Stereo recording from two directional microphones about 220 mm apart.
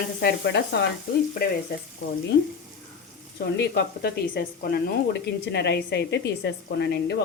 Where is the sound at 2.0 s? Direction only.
55° left (ahead or behind).